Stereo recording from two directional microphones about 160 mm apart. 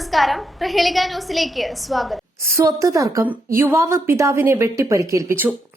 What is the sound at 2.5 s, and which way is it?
A woman's voice, 20° right (ahead or behind).